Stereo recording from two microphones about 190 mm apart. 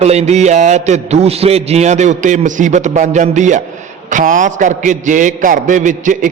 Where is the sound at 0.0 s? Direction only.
35° right (ahead or behind).